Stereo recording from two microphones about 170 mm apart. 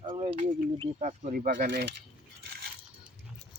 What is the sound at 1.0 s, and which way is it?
Speech, 50° right (ahead or behind).